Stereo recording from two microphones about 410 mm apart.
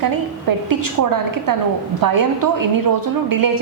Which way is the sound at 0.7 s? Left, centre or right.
Right.